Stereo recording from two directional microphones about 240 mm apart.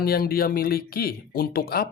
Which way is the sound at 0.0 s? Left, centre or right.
Left.